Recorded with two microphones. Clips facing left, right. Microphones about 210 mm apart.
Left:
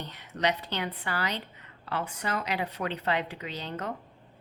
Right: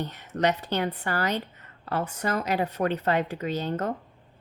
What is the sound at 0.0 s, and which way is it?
A woman's voice, 45° right (ahead or behind).